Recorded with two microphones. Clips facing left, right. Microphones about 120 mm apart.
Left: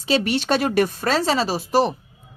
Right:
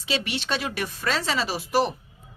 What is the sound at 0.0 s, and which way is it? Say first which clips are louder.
A woman's voice: left 8 dB; 40° left (ahead or behind).